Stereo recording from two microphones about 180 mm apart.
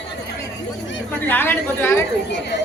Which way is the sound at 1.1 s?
10° left (ahead or behind).